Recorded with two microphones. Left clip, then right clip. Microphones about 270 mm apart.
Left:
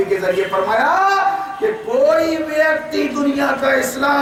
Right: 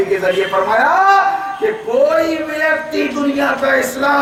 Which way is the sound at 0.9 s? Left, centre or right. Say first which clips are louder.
Right 4 dB; centre.